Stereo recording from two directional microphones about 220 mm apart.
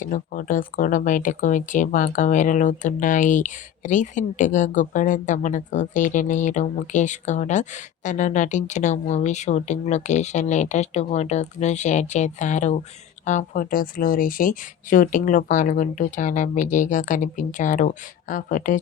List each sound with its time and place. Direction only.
0.0 s speech: 35° left (ahead or behind)